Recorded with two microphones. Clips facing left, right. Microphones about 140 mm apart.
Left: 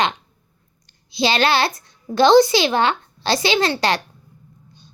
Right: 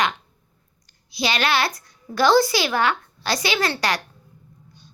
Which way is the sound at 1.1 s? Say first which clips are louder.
Left 4 dB; 30° left (ahead or behind).